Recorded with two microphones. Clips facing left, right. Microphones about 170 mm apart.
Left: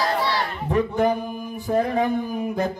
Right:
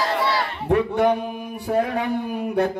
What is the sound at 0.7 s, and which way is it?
Music, 70° right (ahead or behind).